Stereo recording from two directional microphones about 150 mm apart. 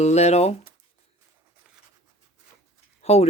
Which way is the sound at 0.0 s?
45° left (ahead or behind).